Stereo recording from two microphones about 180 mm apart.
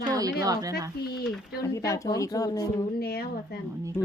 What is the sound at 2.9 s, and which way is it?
Speech, 60° left (ahead or behind).